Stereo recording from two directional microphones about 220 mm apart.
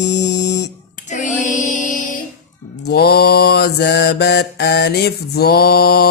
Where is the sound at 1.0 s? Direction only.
35° left (ahead or behind).